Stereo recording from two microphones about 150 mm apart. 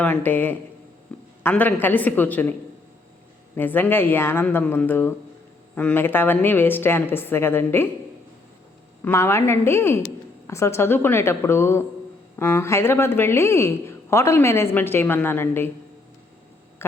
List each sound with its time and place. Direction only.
0.0 s speech: 10° left (ahead or behind)
1.1 s a sound: 10° left (ahead or behind)
1.5 s speech: 10° left (ahead or behind)
9.0 s speech: 15° left (ahead or behind)